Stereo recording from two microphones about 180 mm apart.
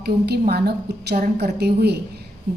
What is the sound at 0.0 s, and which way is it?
Speech, 60° right (ahead or behind).